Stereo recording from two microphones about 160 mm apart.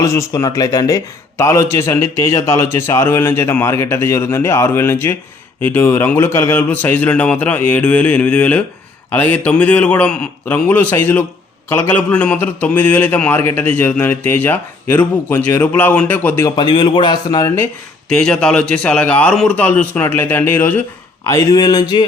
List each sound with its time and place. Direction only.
0.0 s a man's voice: 20° left (ahead or behind)
16.6 s a man's voice: 30° left (ahead or behind)
18.1 s a man's voice: 5° left (ahead or behind)
21.2 s a man's voice: 20° left (ahead or behind)